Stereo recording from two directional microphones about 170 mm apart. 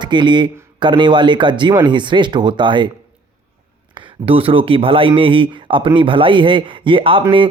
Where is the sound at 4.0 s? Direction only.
30° right (ahead or behind).